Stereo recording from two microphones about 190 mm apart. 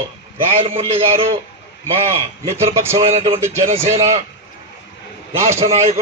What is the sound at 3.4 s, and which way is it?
Speech, 15° right (ahead or behind).